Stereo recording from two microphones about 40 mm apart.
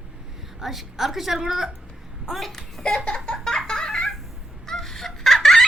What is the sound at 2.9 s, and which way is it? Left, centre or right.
Laughter, centre.